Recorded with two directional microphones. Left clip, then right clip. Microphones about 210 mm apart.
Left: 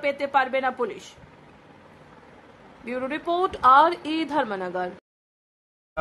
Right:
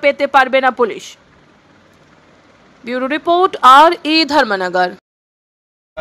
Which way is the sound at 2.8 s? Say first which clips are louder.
Right 11 dB; 20° right (ahead or behind).